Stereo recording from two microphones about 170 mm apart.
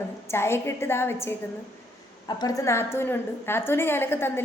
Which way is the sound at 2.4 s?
20° left (ahead or behind).